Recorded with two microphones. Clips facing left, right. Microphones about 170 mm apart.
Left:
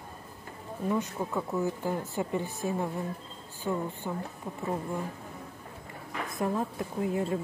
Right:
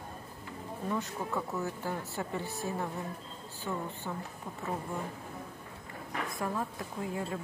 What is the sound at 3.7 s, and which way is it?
Speech, 30° left (ahead or behind).